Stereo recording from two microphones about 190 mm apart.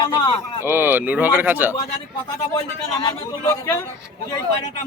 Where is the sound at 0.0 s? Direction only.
25° left (ahead or behind).